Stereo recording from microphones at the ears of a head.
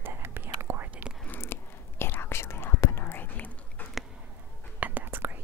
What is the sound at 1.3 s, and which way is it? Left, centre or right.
Whispering, left.